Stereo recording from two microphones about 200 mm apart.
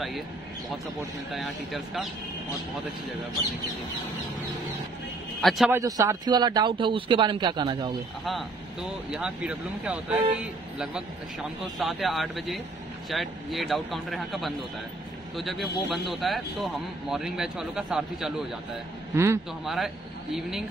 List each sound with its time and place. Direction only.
1.3 s a man's voice: centre (ahead or behind)
5.4 s a man's voice: centre (ahead or behind)
5.7 s a man's voice: 15° right (ahead or behind)
9.1 s a man's voice: 5° right (ahead or behind)
19.6 s a man's voice: centre (ahead or behind)